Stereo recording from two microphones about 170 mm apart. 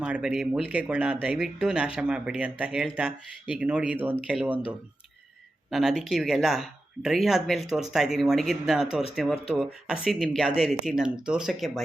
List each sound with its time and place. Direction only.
0.0 s speech: 5° right (ahead or behind)
5.7 s speech: centre (ahead or behind)